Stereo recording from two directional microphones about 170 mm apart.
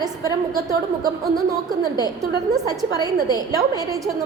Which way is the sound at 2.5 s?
20° right (ahead or behind).